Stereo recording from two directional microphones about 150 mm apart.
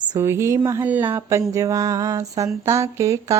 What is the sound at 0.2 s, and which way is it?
Speech, 20° right (ahead or behind).